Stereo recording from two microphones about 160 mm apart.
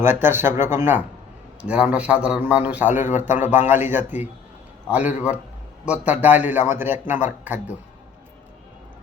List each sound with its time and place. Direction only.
0.0 s a man's voice: 15° right (ahead or behind)
3.1 s speech: 50° left (ahead or behind)
3.3 s a man's voice: 10° right (ahead or behind)